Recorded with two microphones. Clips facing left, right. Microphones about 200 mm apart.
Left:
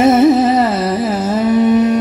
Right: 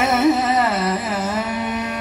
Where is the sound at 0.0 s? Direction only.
35° left (ahead or behind).